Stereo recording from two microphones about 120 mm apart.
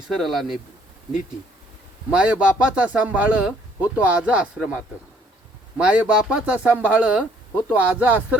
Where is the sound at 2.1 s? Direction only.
10° right (ahead or behind).